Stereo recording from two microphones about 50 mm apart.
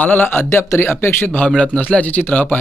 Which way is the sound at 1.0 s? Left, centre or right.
Left.